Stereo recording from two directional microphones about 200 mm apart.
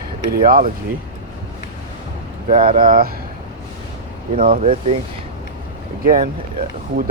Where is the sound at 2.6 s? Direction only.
25° right (ahead or behind).